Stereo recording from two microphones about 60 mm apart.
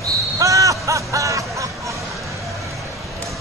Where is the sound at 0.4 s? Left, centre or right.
Right.